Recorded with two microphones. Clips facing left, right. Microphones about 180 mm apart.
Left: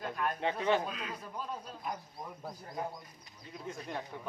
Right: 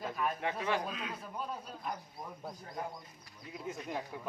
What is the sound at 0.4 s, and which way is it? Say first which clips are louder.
Speech: left 7 dB; 25° left (ahead or behind).